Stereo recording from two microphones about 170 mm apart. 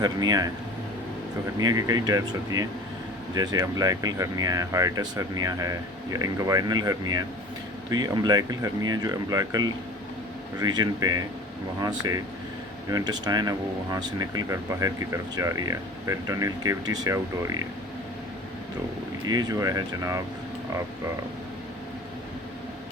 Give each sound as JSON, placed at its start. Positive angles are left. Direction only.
{"t": 0.0, "sound": "speech", "side_deg": -20}
{"t": 1.5, "sound": "speech", "side_deg": -20}
{"t": 19.3, "sound": "speech", "side_deg": -20}